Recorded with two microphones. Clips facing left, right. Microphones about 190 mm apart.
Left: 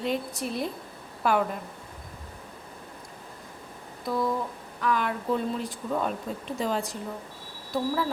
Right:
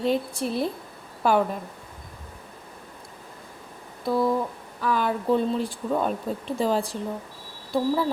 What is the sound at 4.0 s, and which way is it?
Speech, 30° right (ahead or behind).